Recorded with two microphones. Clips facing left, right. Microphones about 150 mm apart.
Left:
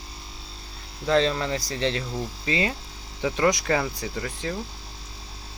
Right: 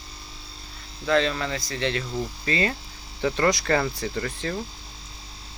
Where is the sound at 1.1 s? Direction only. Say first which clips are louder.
Left 1 dB; 30° left (ahead or behind).